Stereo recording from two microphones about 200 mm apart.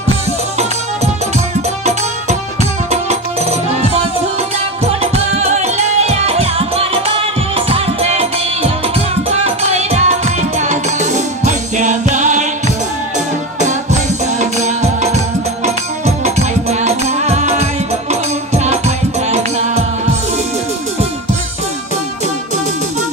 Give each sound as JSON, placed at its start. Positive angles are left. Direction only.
{"t": 2.9, "sound": "music", "side_deg": -35}
{"t": 5.0, "sound": "music", "side_deg": -30}
{"t": 14.4, "sound": "music", "side_deg": -35}